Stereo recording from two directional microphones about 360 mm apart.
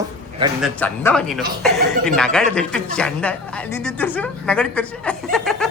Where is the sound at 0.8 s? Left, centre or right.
Centre.